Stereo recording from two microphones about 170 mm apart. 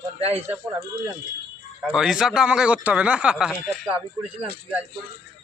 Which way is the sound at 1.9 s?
5° right (ahead or behind).